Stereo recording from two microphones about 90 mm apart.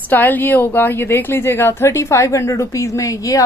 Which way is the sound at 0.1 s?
20° left (ahead or behind).